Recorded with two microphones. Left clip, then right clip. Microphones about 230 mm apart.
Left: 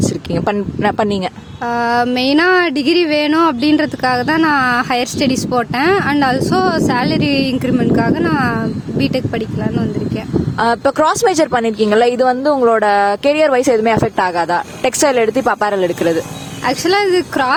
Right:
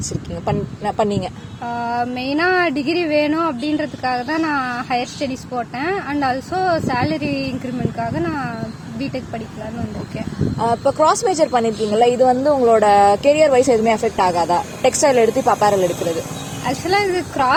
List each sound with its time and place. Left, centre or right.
0.4 s speech: left
10.6 s speech: left